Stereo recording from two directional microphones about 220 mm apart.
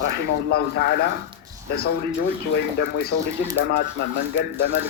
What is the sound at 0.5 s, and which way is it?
Speech, 45° left (ahead or behind).